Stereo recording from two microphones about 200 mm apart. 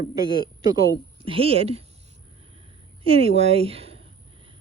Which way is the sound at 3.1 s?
30° right (ahead or behind).